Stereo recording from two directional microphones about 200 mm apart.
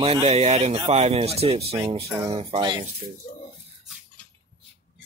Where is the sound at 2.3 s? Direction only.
30° right (ahead or behind).